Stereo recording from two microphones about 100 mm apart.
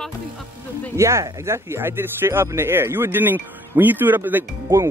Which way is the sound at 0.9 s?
30° right (ahead or behind).